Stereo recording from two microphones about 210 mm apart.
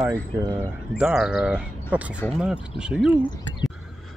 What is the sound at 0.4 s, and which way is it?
Speech, 15° right (ahead or behind).